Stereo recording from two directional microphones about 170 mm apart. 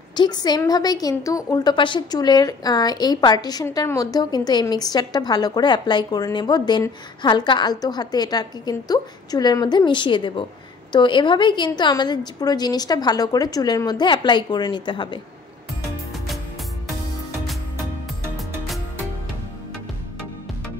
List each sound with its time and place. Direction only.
0.1 s a woman's voice: 25° left (ahead or behind)